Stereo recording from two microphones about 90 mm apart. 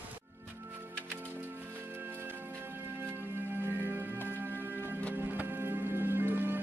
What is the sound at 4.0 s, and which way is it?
Music, 25° right (ahead or behind).